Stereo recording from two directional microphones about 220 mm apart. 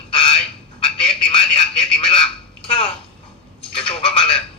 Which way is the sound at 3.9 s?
25° left (ahead or behind).